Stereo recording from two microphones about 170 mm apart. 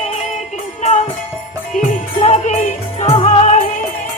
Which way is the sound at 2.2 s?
40° left (ahead or behind).